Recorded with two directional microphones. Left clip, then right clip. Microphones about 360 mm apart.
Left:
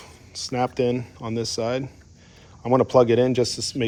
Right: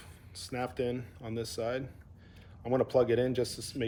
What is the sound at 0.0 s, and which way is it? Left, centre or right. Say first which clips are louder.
A man's voice: left 13 dB; centre.